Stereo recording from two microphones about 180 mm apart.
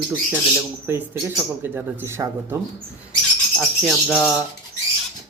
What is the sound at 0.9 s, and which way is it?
Speech, 10° right (ahead or behind).